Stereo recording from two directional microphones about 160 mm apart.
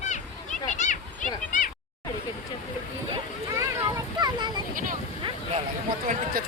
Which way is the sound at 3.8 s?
20° right (ahead or behind).